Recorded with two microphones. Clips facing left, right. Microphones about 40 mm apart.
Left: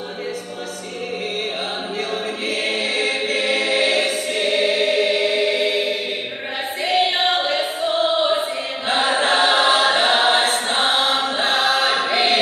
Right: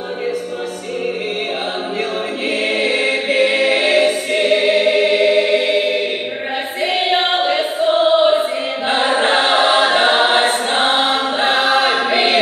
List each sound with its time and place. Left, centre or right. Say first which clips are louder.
2.0 s choir: right 2 dB; right
7.4 s choir: right 5 dB; centre
11.2 s chant: right 3 dB; centre